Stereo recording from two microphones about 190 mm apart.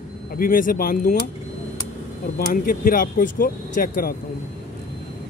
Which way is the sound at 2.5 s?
50° left (ahead or behind).